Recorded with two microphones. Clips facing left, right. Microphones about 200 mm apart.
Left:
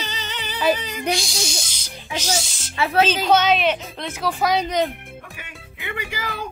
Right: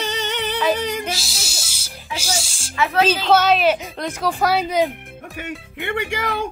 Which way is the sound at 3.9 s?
5° left (ahead or behind).